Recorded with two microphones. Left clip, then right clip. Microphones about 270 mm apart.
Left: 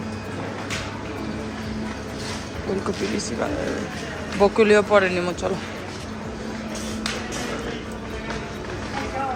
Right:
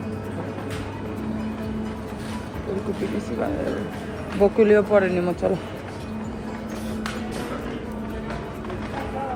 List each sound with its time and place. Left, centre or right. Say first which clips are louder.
4.4 s speech: left 1 dB; centre